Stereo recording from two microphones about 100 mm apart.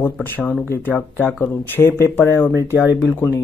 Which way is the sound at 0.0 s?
20° left (ahead or behind).